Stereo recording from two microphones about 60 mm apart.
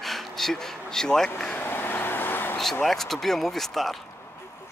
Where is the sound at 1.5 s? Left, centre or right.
Left.